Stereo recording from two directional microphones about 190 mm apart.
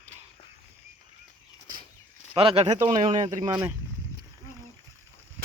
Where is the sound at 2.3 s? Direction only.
30° right (ahead or behind).